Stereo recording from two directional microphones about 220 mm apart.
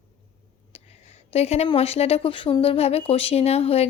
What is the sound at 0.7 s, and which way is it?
Speech, 30° left (ahead or behind).